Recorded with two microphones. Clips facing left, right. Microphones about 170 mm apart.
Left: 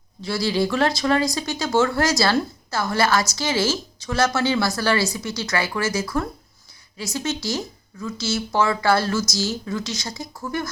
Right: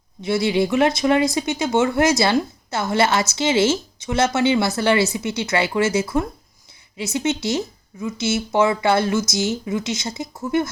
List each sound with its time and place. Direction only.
0.2 s a woman's voice: 20° right (ahead or behind)